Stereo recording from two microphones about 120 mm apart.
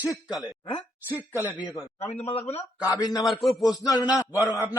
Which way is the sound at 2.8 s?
30° left (ahead or behind).